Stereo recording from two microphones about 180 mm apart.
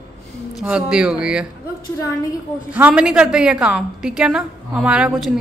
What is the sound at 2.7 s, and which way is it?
A woman's voice, 5° right (ahead or behind).